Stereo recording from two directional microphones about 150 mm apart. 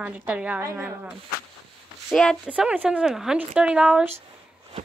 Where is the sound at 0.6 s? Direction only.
20° right (ahead or behind).